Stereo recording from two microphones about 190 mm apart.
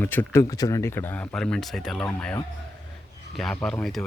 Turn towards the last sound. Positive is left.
turn(degrees=0)  # may be behind; listen again after turning